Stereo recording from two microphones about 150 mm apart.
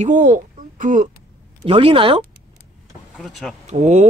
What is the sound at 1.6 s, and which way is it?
Speech, 40° right (ahead or behind).